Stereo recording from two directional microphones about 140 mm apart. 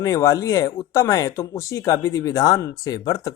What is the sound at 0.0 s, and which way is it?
Speech, 25° left (ahead or behind).